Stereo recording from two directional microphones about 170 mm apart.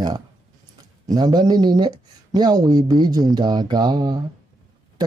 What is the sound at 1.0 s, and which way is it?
Speech, 25° right (ahead or behind).